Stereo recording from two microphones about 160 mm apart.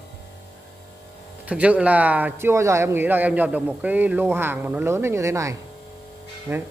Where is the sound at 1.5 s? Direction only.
10° right (ahead or behind).